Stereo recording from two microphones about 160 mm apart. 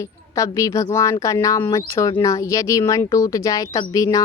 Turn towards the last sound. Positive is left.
turn(degrees=20)  # may be behind; listen again after turning